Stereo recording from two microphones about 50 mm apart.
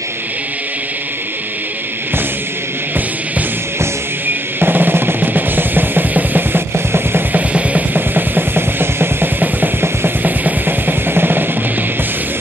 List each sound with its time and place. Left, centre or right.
4.3 s music: right
6.9 s drum kit: right
7.3 s music: right